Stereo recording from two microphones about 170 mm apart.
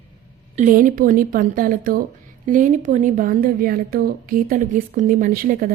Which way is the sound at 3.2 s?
60° right (ahead or behind).